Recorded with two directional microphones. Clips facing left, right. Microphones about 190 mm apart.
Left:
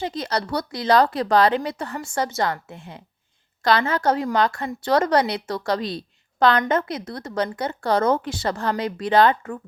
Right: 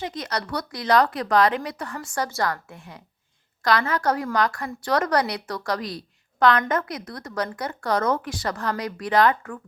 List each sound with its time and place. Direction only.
0.0 s a woman's voice: 30° left (ahead or behind)